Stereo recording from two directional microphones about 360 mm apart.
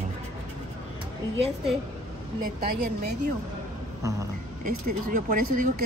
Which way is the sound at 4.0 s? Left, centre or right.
Centre.